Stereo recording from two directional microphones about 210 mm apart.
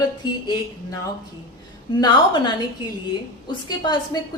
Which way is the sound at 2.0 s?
20° left (ahead or behind).